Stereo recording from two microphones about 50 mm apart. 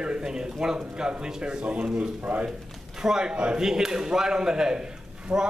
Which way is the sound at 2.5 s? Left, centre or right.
Centre.